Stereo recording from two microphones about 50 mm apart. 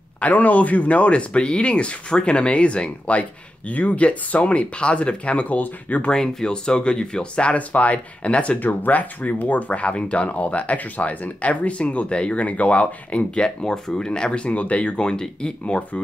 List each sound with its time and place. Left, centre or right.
0.2 s speech: left
6.1 s speech: centre
7.5 s speech: left
8.5 s speech: left